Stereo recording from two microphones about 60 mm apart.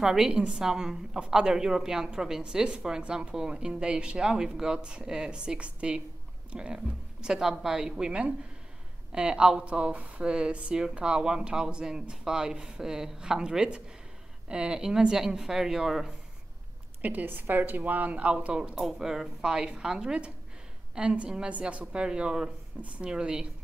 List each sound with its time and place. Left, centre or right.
0.0 s speech: centre
17.0 s a woman's voice: right
18.8 s speech: centre